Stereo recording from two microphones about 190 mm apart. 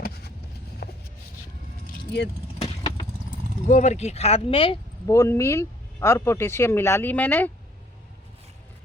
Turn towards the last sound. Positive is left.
turn(degrees=10)  # may be behind; listen again after turning